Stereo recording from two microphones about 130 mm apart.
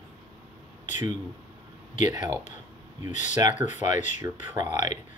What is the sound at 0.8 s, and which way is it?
Speech, 70° left (ahead or behind).